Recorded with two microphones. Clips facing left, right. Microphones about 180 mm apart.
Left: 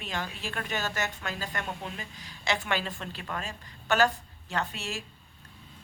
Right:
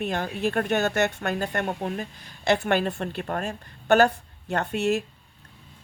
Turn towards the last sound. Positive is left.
turn(degrees=-55)  # may be behind; listen again after turning